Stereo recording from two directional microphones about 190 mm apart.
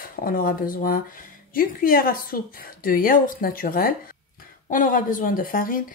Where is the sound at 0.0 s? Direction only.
50° left (ahead or behind).